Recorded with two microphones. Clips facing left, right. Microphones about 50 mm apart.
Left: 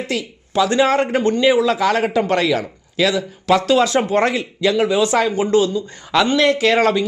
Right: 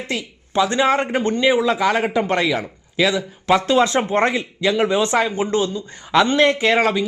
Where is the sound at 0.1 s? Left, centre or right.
Right.